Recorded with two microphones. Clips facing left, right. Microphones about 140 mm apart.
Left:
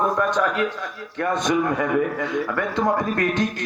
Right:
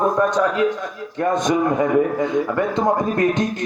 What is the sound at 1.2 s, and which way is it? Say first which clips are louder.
A man's voice: right 3 dB; 20° right (ahead or behind).